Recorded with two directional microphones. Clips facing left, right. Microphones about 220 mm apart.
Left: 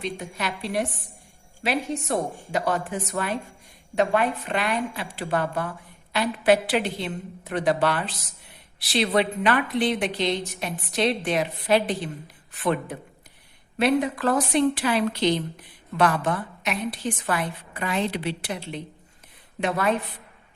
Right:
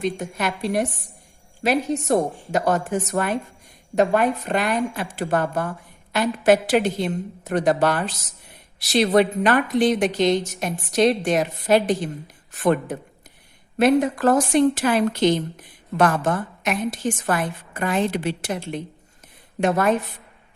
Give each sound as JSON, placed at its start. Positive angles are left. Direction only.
{"t": 0.0, "sound": "a woman's voice", "side_deg": -45}